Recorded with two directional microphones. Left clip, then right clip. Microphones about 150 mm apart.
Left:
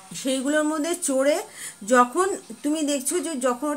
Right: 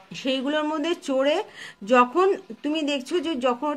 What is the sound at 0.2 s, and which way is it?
A woman's voice, 30° right (ahead or behind).